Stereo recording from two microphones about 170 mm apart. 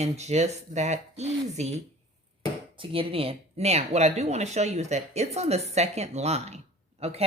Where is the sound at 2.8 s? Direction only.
35° right (ahead or behind).